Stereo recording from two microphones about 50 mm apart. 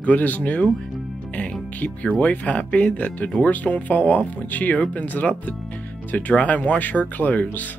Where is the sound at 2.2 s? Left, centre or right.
Left.